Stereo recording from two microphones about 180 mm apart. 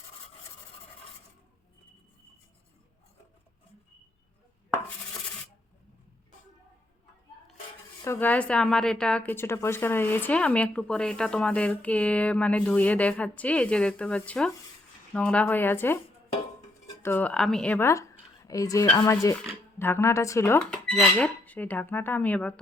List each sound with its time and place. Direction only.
8.0 s a woman's voice: 10° left (ahead or behind)